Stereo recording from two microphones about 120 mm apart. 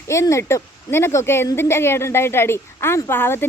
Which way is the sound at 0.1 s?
25° left (ahead or behind).